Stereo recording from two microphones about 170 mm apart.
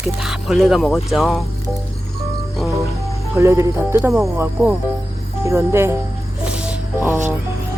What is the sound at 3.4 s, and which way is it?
Speech, 15° right (ahead or behind).